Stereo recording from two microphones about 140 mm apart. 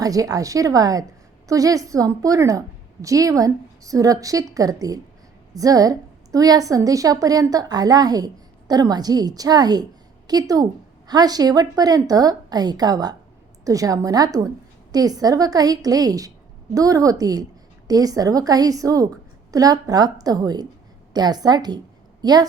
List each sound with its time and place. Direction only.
0.0 s a woman's voice: 25° right (ahead or behind)